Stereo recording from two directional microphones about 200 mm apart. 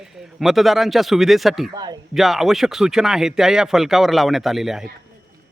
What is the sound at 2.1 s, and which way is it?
Speech, centre (ahead or behind).